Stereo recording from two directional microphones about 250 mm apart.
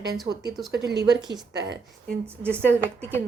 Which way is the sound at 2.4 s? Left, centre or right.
Centre.